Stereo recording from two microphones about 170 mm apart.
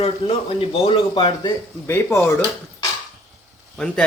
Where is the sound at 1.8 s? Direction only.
15° left (ahead or behind).